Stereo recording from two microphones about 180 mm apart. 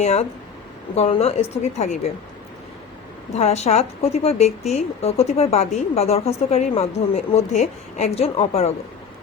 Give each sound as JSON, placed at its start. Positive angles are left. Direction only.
{"t": 0.0, "sound": "a woman's voice", "side_deg": 35}
{"t": 3.3, "sound": "a woman's voice", "side_deg": 35}